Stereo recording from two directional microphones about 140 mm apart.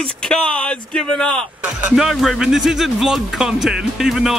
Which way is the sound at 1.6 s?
5° right (ahead or behind).